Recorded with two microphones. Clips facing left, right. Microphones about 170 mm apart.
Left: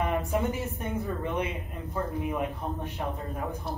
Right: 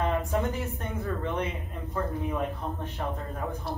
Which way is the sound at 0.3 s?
10° left (ahead or behind).